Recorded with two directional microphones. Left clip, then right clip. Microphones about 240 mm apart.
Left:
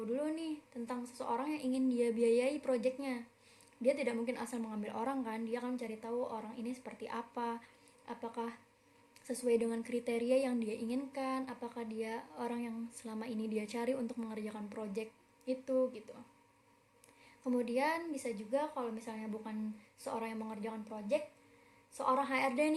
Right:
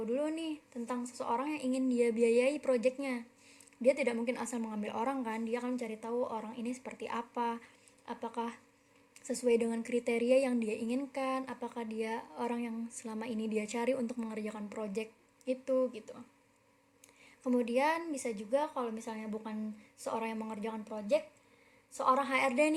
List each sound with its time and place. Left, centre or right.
0.0 s a woman's voice: right
17.4 s a woman's voice: right